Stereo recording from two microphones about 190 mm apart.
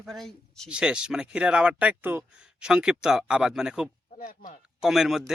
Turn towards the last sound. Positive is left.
turn(degrees=0)  # may be behind; listen again after turning